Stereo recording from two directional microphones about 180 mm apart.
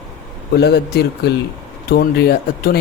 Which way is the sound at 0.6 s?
65° left (ahead or behind).